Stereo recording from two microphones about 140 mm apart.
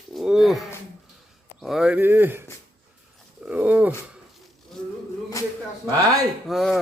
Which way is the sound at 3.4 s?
10° right (ahead or behind).